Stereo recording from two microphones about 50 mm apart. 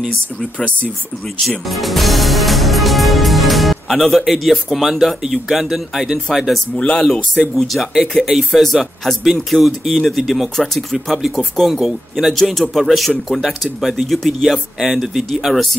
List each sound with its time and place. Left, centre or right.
1.7 s music: centre
6.8 s speech: left
7.5 s music: centre